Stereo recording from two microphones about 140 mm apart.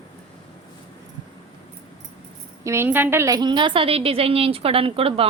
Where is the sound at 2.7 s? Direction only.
15° right (ahead or behind).